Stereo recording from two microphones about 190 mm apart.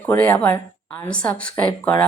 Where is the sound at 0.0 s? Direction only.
10° left (ahead or behind).